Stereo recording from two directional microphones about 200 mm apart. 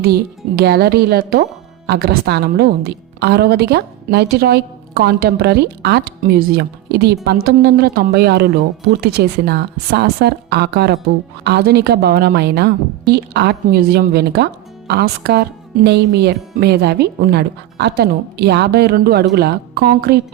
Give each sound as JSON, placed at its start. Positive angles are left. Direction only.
{"t": 0.0, "sound": "a woman's voice", "side_deg": -50}